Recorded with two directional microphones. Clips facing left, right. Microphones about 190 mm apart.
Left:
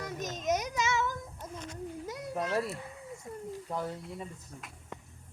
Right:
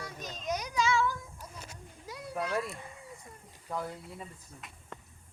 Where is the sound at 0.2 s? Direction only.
20° left (ahead or behind).